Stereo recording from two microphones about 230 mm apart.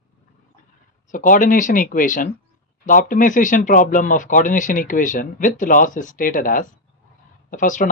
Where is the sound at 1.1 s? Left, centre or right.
Left.